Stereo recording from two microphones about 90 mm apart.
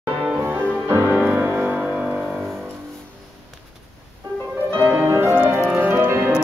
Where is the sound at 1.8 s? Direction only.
10° right (ahead or behind).